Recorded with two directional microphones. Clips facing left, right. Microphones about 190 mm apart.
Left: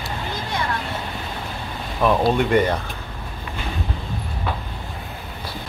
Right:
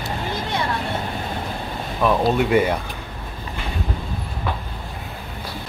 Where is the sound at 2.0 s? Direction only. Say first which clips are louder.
Even; centre (ahead or behind).